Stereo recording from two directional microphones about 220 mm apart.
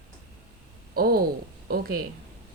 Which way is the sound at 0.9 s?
45° right (ahead or behind).